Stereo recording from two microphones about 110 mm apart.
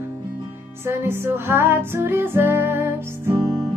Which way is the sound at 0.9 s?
25° right (ahead or behind).